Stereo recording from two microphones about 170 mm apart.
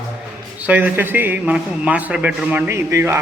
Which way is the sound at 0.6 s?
10° right (ahead or behind).